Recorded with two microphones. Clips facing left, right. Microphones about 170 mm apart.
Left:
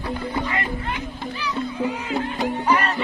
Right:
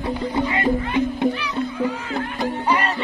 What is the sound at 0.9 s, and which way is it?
Music, 60° right (ahead or behind).